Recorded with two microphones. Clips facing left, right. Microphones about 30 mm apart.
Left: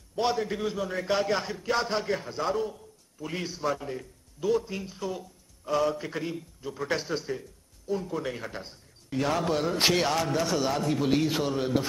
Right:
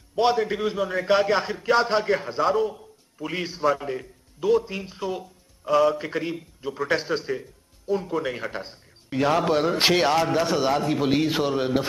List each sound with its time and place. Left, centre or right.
0.1 s a man's voice: right
2.4 s a man's voice: centre
2.7 s a man's voice: right
5.7 s a man's voice: centre
6.1 s a man's voice: right
8.1 s a man's voice: centre
8.4 s a man's voice: right